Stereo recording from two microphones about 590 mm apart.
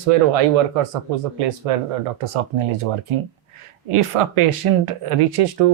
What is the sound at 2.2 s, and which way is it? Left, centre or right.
Speech, right.